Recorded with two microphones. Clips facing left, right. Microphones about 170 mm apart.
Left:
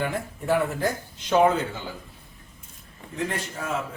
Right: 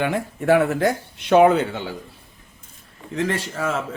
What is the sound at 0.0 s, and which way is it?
A man's voice, 75° right (ahead or behind).